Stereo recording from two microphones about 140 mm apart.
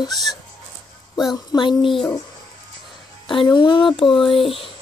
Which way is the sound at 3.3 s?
35° left (ahead or behind).